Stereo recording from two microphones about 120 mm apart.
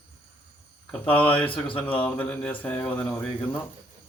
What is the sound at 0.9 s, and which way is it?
Speech, 15° left (ahead or behind).